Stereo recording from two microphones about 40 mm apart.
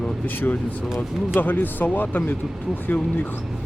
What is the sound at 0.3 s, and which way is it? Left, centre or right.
Speech, left.